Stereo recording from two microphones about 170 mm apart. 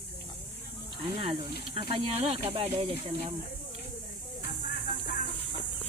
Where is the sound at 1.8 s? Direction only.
30° right (ahead or behind).